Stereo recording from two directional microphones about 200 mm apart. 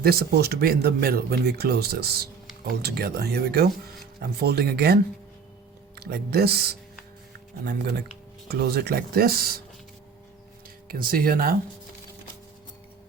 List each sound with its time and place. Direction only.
0.0 s speech: 50° right (ahead or behind)
6.0 s speech: 50° right (ahead or behind)
10.8 s speech: 45° right (ahead or behind)